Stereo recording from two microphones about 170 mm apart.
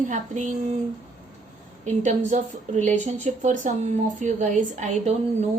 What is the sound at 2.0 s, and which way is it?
A woman's voice, 45° right (ahead or behind).